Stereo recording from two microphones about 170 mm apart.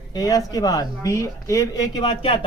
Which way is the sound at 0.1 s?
20° left (ahead or behind).